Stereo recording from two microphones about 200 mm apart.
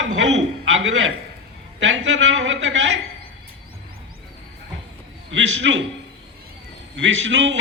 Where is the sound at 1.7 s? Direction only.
65° right (ahead or behind).